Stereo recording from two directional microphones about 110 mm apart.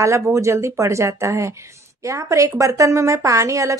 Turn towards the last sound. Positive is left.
turn(degrees=-30)  # may be behind; listen again after turning